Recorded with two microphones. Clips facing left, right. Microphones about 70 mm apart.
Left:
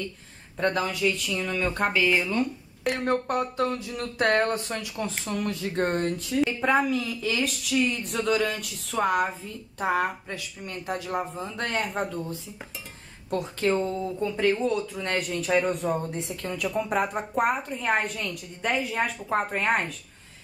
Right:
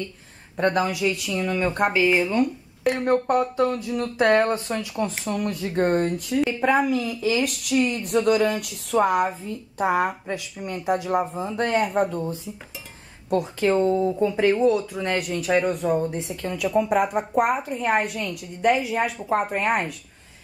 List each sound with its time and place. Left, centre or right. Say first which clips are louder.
0.6 s speech: right 4 dB; centre
13.9 s speech: right 8 dB; right
14.2 s speech: right 4 dB; centre